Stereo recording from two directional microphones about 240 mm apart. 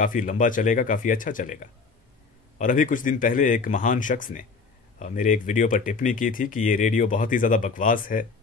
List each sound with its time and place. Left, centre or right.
0.0 s speech: left